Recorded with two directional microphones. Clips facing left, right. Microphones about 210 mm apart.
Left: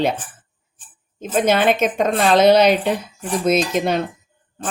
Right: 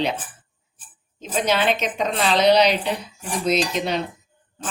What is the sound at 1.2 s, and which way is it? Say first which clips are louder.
A woman's voice: left 5 dB; 50° left (ahead or behind).